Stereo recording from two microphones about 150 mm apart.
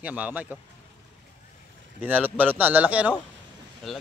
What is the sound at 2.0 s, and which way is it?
Speech, 10° right (ahead or behind).